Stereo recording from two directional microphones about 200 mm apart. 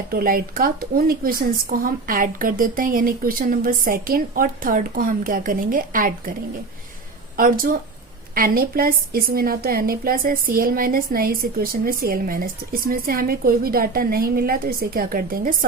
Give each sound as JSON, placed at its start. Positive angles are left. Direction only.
{"t": 0.1, "sound": "a woman's voice", "side_deg": -45}
{"t": 7.3, "sound": "a woman's voice", "side_deg": -45}